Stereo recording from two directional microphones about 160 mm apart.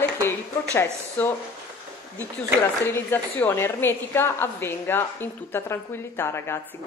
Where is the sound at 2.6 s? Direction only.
15° left (ahead or behind).